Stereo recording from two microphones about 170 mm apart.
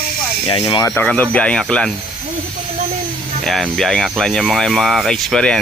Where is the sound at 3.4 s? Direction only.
Centre (ahead or behind).